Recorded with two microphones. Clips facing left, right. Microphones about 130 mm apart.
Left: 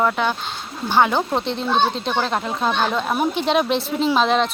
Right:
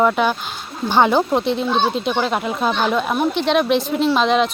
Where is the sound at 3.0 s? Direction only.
5° left (ahead or behind).